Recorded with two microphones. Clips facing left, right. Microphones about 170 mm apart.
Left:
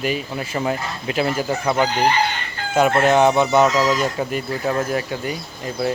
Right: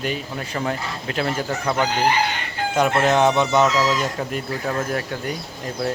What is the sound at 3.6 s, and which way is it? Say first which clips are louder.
Speech: left 2 dB; 25° left (ahead or behind).